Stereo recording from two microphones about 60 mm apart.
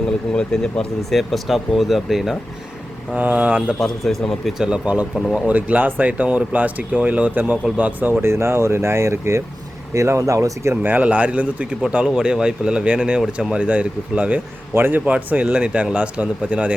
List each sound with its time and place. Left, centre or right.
0.3 s speech: centre
1.1 s speech: centre
3.2 s speech: right
3.8 s speech: centre
4.4 s speech: centre; by 8.1 s right
8.2 s speech: right
10.8 s speech: right
14.7 s a man's voice: right
15.0 s speech: right